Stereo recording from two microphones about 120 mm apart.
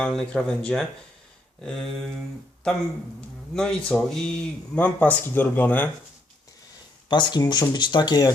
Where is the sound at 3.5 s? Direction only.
5° left (ahead or behind).